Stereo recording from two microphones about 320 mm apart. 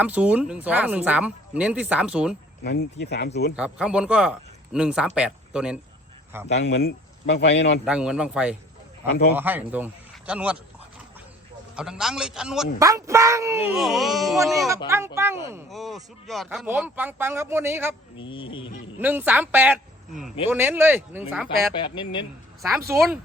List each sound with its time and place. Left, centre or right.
0.0 s speech: centre
2.6 s speech: left
3.5 s speech: centre
6.5 s speech: left
7.9 s speech: centre
9.0 s speech: left
9.3 s a man's voice: centre
11.8 s speech: centre
18.2 s a sound: centre
18.9 s speech: centre
21.8 s a sound: centre
22.9 s speech: centre